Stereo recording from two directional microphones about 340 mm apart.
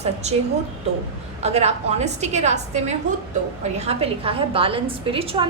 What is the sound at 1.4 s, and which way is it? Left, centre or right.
A woman's voice, centre.